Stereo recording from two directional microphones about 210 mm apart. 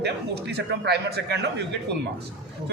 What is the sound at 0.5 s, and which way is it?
Speech, 50° right (ahead or behind).